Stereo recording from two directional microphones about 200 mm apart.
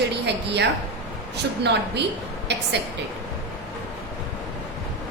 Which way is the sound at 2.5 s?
60° right (ahead or behind).